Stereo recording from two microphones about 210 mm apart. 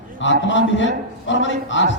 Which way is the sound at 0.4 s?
60° left (ahead or behind).